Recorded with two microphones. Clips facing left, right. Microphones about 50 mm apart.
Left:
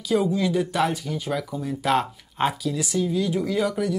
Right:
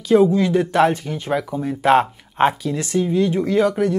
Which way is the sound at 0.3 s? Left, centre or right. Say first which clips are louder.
Right 5 dB; right.